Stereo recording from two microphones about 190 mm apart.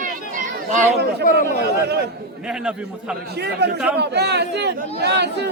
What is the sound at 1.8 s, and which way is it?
Speech, 55° right (ahead or behind).